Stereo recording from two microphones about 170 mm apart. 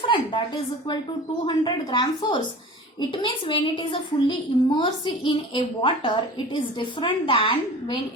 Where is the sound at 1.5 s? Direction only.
25° left (ahead or behind).